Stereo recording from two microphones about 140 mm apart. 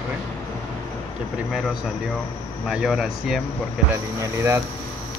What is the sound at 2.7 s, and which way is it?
Speech, 5° right (ahead or behind).